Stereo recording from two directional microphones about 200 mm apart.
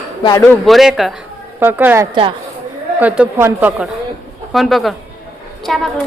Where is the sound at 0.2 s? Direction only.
20° left (ahead or behind).